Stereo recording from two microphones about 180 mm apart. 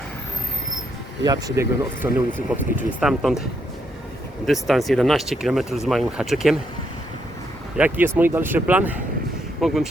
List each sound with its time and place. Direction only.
1.2 s speech: 20° right (ahead or behind)
2.7 s speech: 5° right (ahead or behind)
4.4 s speech: centre (ahead or behind)
7.8 s speech: 10° right (ahead or behind)